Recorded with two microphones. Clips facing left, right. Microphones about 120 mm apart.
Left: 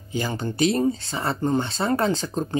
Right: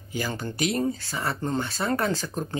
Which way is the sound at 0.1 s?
25° left (ahead or behind).